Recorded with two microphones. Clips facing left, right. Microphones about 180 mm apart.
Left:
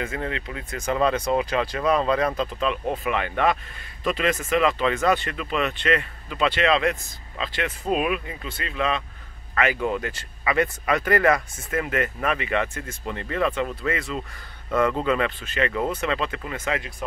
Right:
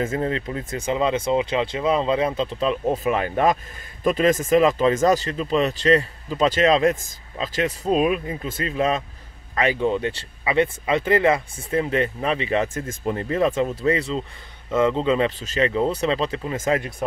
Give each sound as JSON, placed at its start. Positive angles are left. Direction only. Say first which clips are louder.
{"t": 0.1, "sound": "speech", "louder": "right 6 dB", "side_deg": -35}
{"t": 0.7, "sound": "speech", "louder": "even", "side_deg": -20}
{"t": 12.7, "sound": "speech", "louder": "right 6 dB", "side_deg": -45}